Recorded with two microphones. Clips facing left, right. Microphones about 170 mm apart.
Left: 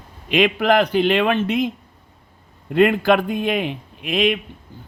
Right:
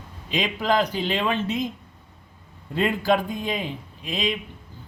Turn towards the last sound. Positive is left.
turn(degrees=65)  # may be behind; listen again after turning